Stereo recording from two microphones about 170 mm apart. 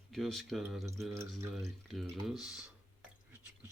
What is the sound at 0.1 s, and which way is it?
Speech, centre (ahead or behind).